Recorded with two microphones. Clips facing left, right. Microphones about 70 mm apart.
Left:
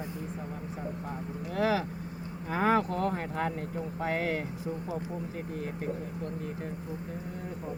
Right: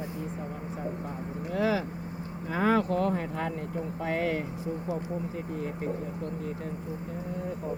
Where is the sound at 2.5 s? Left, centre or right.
Left.